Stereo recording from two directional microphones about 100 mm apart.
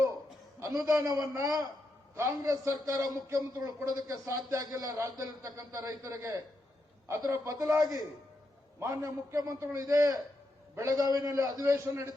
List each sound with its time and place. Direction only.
0.6 s a man's voice: 35° right (ahead or behind)